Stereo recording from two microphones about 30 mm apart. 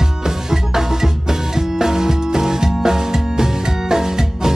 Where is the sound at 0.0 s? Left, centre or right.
Centre.